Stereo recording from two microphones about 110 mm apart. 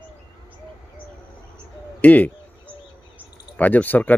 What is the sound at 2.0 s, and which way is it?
Bird, 15° left (ahead or behind).